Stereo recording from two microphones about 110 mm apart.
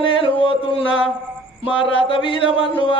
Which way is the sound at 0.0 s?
50° left (ahead or behind).